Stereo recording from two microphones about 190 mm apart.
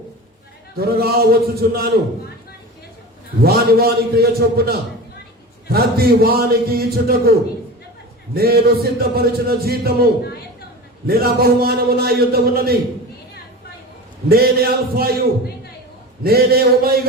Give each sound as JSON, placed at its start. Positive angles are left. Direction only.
{"t": 0.8, "sound": "a man's voice", "side_deg": -55}
{"t": 3.4, "sound": "a man's voice", "side_deg": -55}
{"t": 8.4, "sound": "a man's voice", "side_deg": -55}
{"t": 14.3, "sound": "a man's voice", "side_deg": -55}